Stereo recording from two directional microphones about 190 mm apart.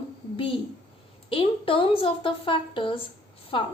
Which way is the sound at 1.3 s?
30° left (ahead or behind).